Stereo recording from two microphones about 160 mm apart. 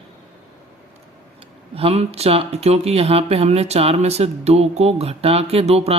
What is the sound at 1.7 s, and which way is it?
Speech, 40° right (ahead or behind).